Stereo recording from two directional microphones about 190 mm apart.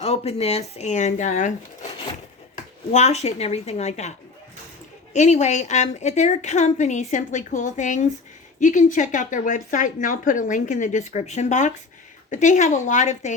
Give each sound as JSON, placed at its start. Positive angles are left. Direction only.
{"t": 0.0, "sound": "speech", "side_deg": 35}
{"t": 2.9, "sound": "speech", "side_deg": 35}
{"t": 5.1, "sound": "speech", "side_deg": 35}